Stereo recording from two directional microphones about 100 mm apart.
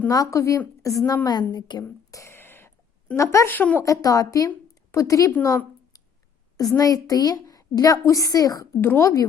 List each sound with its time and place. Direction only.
0.1 s a child's voice: 35° left (ahead or behind)
1.2 s a woman's voice: 45° left (ahead or behind)
2.0 s a sound: 35° left (ahead or behind)
2.3 s a sound: 20° left (ahead or behind)
3.2 s a woman's voice: 25° left (ahead or behind)
3.8 s a woman's voice: 35° left (ahead or behind)
5.5 s a sound: 35° left (ahead or behind)
6.6 s a child's voice: 35° left (ahead or behind)
8.8 s a woman's voice: 20° left (ahead or behind)